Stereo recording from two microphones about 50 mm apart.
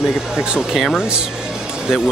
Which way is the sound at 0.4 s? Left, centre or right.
Centre.